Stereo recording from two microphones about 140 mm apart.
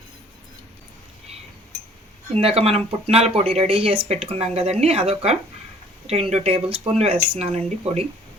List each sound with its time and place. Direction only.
2.4 s speech: 45° right (ahead or behind)